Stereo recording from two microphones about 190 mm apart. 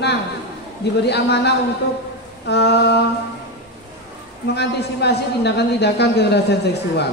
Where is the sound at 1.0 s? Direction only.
60° left (ahead or behind).